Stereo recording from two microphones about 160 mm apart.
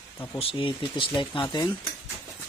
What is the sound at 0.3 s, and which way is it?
Speech, 35° left (ahead or behind).